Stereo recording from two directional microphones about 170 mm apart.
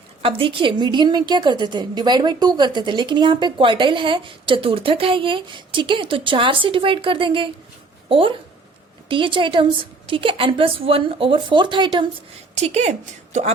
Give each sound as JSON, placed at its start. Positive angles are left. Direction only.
{"t": 0.2, "sound": "a woman's voice", "side_deg": -30}
{"t": 12.5, "sound": "speech", "side_deg": -40}